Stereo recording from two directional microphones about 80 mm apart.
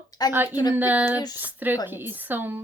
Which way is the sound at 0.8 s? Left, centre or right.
Right.